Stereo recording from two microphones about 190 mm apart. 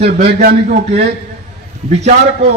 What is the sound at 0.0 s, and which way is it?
Speech, 35° right (ahead or behind).